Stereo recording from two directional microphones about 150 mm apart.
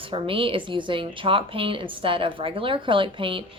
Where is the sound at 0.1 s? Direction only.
35° right (ahead or behind).